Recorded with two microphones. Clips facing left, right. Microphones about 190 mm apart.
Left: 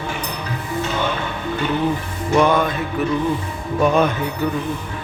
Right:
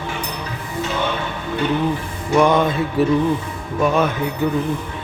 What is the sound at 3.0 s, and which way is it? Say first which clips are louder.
Speech: right 5 dB; 35° right (ahead or behind).